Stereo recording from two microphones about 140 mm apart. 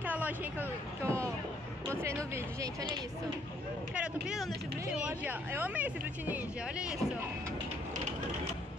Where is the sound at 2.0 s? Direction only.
20° right (ahead or behind).